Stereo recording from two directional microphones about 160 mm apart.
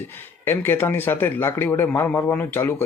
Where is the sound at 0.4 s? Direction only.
15° left (ahead or behind).